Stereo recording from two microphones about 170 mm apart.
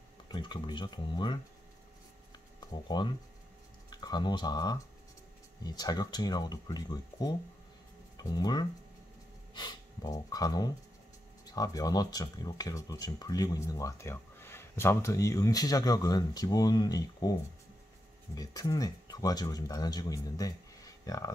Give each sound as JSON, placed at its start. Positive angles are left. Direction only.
{"t": 0.3, "sound": "speech", "side_deg": 25}
{"t": 2.7, "sound": "speech", "side_deg": 25}